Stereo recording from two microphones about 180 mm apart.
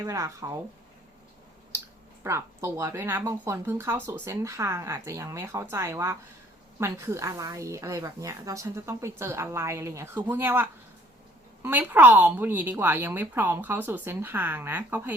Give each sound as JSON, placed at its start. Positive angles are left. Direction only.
{"t": 0.0, "sound": "speech", "side_deg": -15}
{"t": 2.2, "sound": "speech", "side_deg": -15}